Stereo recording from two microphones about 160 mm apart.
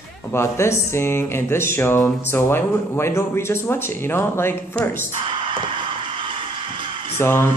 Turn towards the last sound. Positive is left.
turn(degrees=15)  # may be behind; listen again after turning